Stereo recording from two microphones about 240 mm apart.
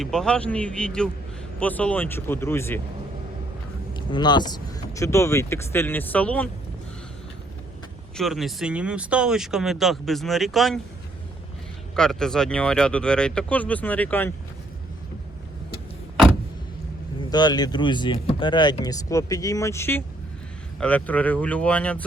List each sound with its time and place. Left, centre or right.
0.0 s speech: centre
3.9 s speech: centre
8.1 s speech: centre
11.9 s speech: centre
17.2 s speech: centre